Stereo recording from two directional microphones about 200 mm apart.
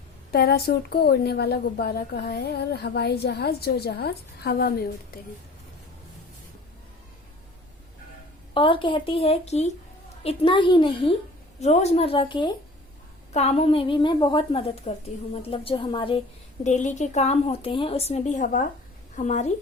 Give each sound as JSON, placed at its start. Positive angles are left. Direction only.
{"t": 0.3, "sound": "a woman's voice", "side_deg": 50}
{"t": 8.5, "sound": "a woman's voice", "side_deg": 25}
{"t": 16.6, "sound": "a woman's voice", "side_deg": 35}